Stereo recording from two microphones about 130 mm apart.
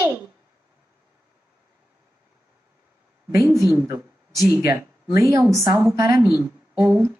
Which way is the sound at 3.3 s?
25° right (ahead or behind).